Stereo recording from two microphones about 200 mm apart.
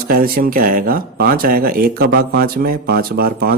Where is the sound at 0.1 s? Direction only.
45° right (ahead or behind).